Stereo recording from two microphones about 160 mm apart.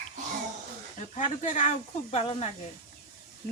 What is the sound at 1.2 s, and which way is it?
Speech, 50° left (ahead or behind).